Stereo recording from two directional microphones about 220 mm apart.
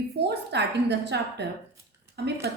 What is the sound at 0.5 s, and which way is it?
A woman's voice, 50° right (ahead or behind).